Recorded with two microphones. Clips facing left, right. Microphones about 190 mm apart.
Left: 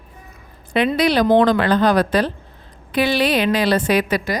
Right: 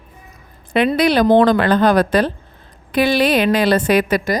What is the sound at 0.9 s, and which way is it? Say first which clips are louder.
A woman's voice: right 2 dB; 50° right (ahead or behind).